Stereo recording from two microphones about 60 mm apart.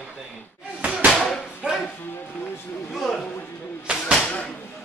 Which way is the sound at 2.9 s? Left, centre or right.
Centre.